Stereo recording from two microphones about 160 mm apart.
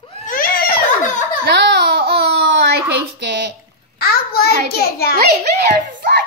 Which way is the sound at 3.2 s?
90° right.